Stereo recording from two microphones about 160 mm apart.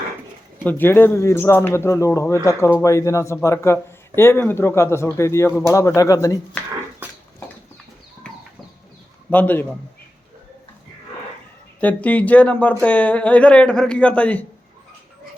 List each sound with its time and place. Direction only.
0.6 s speech: 10° left (ahead or behind)
7.0 s a sound: 10° right (ahead or behind)
8.2 s horse: 5° left (ahead or behind)
9.3 s speech: 10° left (ahead or behind)
11.8 s speech: 10° left (ahead or behind)